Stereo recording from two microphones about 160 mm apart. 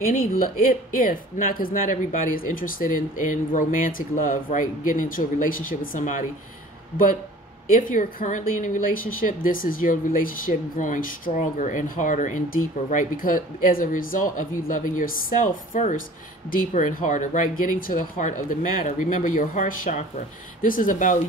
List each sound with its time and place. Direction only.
0.0 s speech: 60° left (ahead or behind)
7.7 s speech: 60° left (ahead or behind)